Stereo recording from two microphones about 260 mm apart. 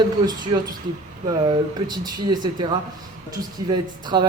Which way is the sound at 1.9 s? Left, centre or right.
Centre.